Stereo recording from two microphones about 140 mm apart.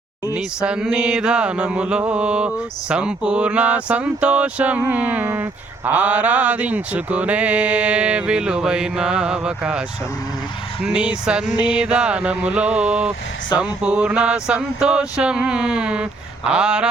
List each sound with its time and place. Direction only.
0.3 s speech: 5° right (ahead or behind)
10.8 s speech: 5° right (ahead or behind)